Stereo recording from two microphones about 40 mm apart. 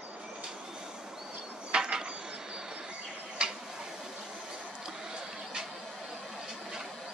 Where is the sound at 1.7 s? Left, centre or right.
Right.